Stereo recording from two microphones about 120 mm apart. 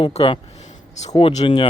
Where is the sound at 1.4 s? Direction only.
45° left (ahead or behind).